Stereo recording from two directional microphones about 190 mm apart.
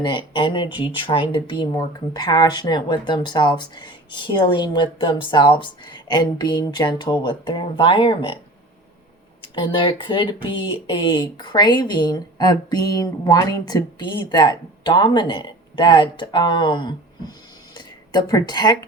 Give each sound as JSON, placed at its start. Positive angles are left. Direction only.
{"t": 0.0, "sound": "speech", "side_deg": 25}
{"t": 9.4, "sound": "speech", "side_deg": 25}